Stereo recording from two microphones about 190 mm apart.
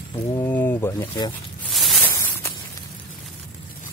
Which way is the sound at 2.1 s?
15° left (ahead or behind).